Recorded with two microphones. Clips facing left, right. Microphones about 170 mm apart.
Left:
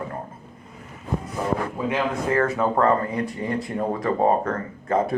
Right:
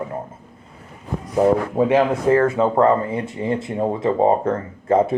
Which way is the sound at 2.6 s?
25° right (ahead or behind).